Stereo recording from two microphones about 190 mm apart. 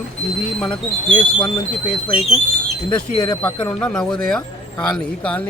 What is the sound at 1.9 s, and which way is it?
Speech, 30° left (ahead or behind).